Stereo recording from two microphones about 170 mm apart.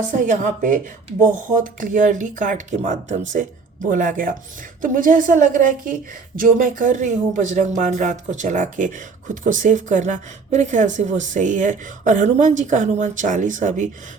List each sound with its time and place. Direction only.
0.1 s speech: 50° right (ahead or behind)